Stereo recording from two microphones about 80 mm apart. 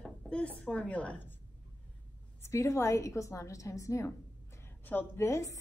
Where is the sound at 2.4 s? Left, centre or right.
Left.